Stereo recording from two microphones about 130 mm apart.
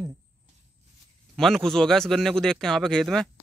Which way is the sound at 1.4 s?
5° left (ahead or behind).